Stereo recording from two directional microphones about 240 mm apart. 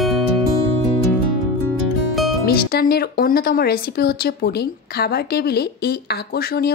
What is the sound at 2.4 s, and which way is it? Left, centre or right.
Speech, left.